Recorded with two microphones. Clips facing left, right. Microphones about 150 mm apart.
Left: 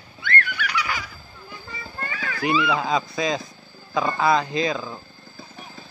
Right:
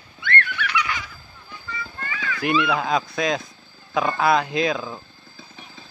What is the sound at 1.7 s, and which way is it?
Clip-clop, 35° left (ahead or behind).